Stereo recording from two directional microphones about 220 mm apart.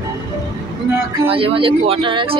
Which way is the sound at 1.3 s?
25° right (ahead or behind).